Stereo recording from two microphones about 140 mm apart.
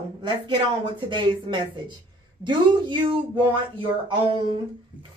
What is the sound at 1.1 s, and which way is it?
Speech, 35° right (ahead or behind).